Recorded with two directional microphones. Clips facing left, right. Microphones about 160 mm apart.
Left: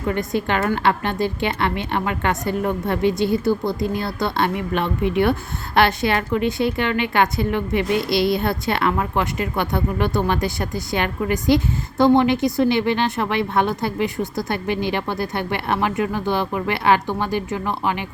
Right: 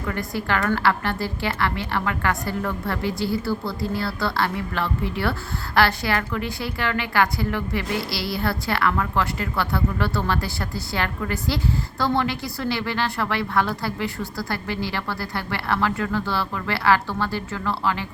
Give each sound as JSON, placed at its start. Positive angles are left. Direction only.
{"t": 0.0, "sound": "a woman's voice", "side_deg": 20}